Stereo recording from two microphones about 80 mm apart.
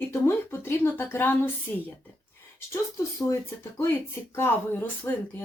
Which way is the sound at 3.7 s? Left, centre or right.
Left.